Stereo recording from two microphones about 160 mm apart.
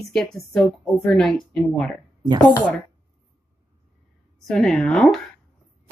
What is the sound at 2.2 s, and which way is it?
Speech, 25° right (ahead or behind).